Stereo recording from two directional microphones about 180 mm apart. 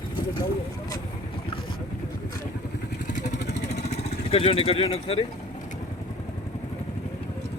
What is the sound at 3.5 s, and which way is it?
Vehicle, 40° left (ahead or behind).